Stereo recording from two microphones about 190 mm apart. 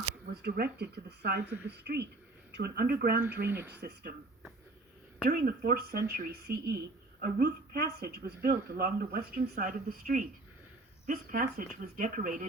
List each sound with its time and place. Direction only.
0.4 s speech: 55° right (ahead or behind)
3.4 s speech: 10° right (ahead or behind)
3.8 s speech: 60° right (ahead or behind)
5.2 s a woman's voice: 50° right (ahead or behind)